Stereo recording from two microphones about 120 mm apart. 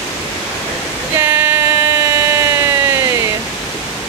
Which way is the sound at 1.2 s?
20° right (ahead or behind).